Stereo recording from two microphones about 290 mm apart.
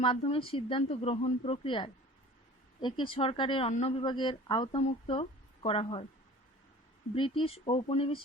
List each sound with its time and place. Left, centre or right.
0.0 s speech: centre
3.0 s speech: centre
7.1 s speech: centre